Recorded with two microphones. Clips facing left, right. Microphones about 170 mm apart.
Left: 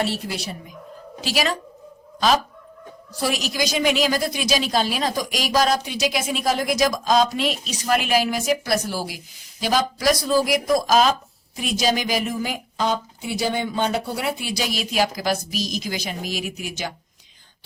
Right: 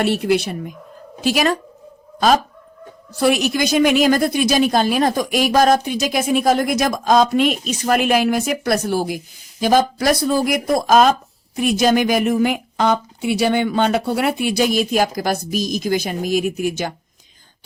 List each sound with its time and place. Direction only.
0.0 s a woman's voice: 60° right (ahead or behind)
1.2 s a woman's voice: 50° right (ahead or behind)